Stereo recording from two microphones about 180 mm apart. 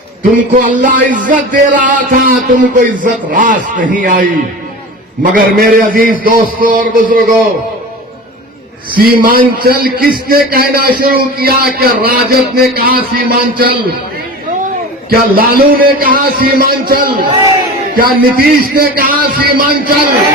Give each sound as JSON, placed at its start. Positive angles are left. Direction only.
{"t": 0.2, "sound": "a man's voice", "side_deg": -45}
{"t": 9.0, "sound": "a man's voice", "side_deg": -55}
{"t": 15.1, "sound": "a man's voice", "side_deg": -55}